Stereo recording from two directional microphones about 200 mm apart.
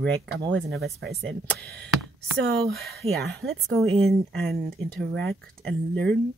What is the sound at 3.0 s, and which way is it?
Speech, 30° right (ahead or behind).